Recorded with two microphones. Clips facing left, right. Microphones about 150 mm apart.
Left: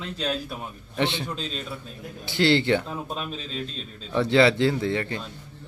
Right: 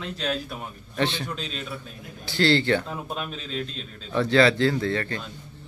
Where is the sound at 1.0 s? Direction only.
20° left (ahead or behind).